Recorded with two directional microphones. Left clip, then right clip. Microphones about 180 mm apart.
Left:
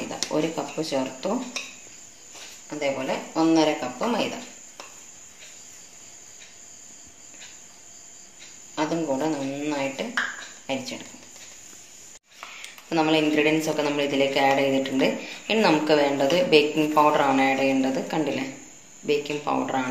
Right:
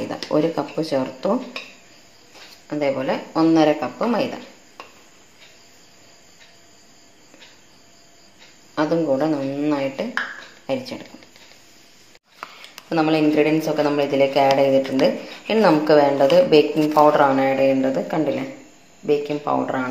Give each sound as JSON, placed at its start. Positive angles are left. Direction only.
{"t": 0.3, "sound": "speech", "side_deg": -35}
{"t": 2.8, "sound": "speech", "side_deg": -40}
{"t": 8.7, "sound": "speech", "side_deg": -40}
{"t": 12.9, "sound": "speech", "side_deg": -40}